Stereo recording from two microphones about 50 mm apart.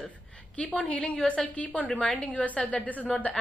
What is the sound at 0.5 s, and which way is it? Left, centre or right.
A woman's voice, left.